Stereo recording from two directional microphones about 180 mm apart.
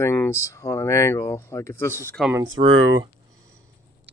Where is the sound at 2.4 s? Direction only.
90° right.